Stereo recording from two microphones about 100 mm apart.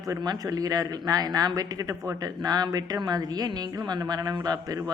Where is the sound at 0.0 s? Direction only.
40° right (ahead or behind).